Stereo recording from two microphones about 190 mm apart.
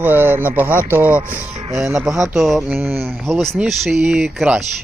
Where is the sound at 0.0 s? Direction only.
10° right (ahead or behind).